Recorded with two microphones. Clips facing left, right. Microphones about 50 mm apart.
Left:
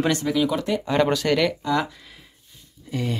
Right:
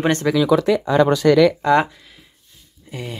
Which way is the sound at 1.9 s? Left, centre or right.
Centre.